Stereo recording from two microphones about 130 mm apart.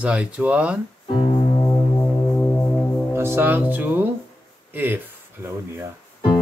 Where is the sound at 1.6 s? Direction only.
15° left (ahead or behind).